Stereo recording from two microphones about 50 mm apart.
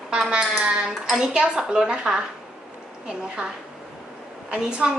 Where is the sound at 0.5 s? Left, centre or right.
Centre.